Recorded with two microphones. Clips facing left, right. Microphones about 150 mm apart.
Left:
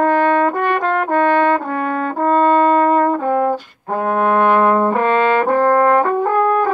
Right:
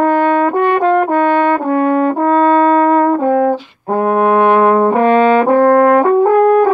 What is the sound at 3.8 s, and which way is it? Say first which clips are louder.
Brass instrument: right 5 dB; 40° right (ahead or behind).